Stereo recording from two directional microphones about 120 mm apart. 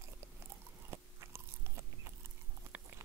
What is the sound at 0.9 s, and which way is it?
Biting, 20° right (ahead or behind).